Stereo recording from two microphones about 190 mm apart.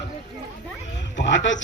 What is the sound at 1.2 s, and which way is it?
Speech, 75° left (ahead or behind).